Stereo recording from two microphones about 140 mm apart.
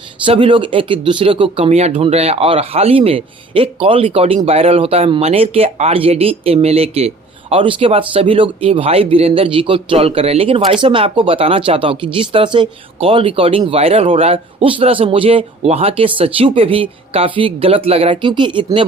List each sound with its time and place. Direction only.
0.3 s speech: 35° right (ahead or behind)